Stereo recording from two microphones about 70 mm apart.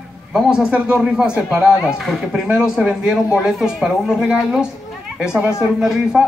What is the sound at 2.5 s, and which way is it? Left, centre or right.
Speech, centre.